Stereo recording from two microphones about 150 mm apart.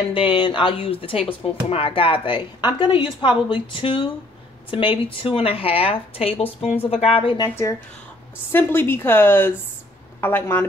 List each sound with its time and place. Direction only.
0.1 s speech: 35° left (ahead or behind)
7.3 s a woman's voice: 20° left (ahead or behind)